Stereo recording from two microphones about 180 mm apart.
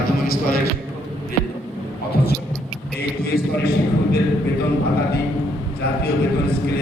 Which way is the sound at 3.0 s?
60° left (ahead or behind).